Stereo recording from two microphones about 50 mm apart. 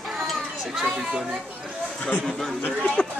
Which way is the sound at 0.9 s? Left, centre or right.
Right.